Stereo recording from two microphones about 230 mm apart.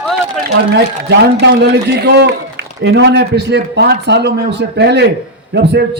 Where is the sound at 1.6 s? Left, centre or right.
Right.